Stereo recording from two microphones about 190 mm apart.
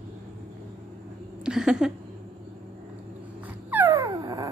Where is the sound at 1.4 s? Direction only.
5° right (ahead or behind).